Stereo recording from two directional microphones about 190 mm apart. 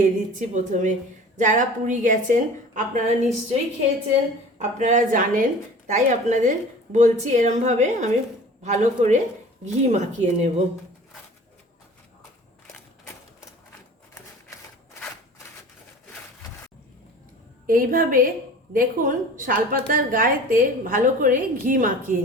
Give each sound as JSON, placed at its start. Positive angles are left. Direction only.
{"t": 0.0, "sound": "a woman's voice", "side_deg": -40}
{"t": 4.5, "sound": "a woman's voice", "side_deg": -40}
{"t": 17.7, "sound": "a woman's voice", "side_deg": -45}